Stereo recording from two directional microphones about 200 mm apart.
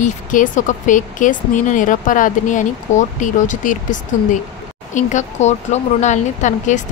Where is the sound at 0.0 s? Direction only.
40° left (ahead or behind).